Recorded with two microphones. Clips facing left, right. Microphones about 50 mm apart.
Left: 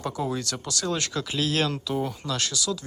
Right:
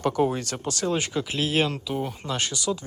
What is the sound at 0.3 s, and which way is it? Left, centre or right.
Speech, right.